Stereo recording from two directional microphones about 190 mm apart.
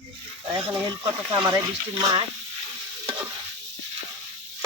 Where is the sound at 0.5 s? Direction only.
25° right (ahead or behind).